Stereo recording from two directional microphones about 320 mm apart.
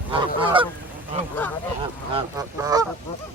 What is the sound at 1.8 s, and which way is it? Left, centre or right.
Speech, centre.